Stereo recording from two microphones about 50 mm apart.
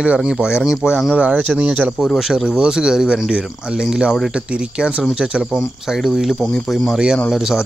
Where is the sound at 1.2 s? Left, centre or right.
Right.